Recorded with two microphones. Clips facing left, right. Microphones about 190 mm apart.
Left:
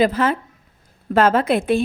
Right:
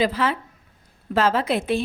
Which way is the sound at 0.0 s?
45° left (ahead or behind).